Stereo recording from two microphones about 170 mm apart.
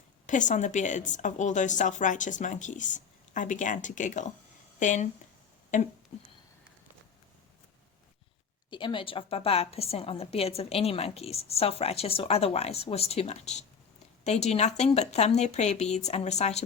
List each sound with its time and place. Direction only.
0.3 s a woman's voice: 45° left (ahead or behind)
8.7 s a woman's voice: 30° left (ahead or behind)